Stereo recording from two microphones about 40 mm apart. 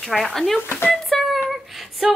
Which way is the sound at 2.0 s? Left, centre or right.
Centre.